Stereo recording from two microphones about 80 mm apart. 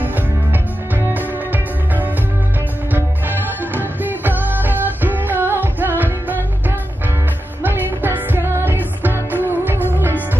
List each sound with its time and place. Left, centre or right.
0.0 s music: right
7.6 s music: right